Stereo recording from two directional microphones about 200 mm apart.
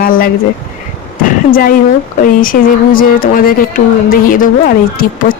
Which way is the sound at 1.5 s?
45° left (ahead or behind).